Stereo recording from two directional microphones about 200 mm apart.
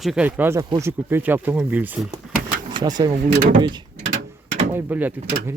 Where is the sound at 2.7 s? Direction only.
20° right (ahead or behind).